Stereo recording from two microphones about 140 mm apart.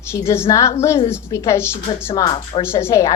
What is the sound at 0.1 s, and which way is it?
A woman's voice, 20° left (ahead or behind).